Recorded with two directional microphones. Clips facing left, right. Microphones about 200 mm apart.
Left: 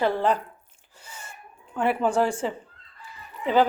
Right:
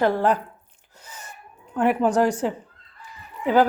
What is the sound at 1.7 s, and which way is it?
Speech, 10° right (ahead or behind).